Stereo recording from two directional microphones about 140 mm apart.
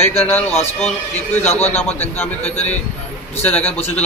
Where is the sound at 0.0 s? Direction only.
45° left (ahead or behind).